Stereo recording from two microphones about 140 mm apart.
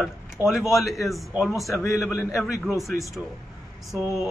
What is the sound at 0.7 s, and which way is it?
Speech, centre (ahead or behind).